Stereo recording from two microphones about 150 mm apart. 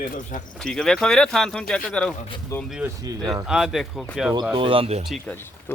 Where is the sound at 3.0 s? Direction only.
25° right (ahead or behind).